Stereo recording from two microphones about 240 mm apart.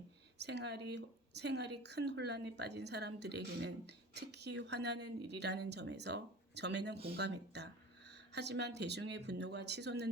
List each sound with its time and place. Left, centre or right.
0.3 s speech: right